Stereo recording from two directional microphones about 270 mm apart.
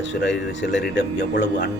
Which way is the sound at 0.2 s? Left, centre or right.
Left.